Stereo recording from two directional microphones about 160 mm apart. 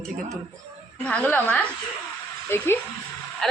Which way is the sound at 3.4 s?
5° left (ahead or behind).